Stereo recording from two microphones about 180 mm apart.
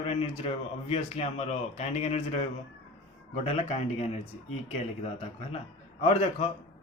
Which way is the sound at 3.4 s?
35° left (ahead or behind).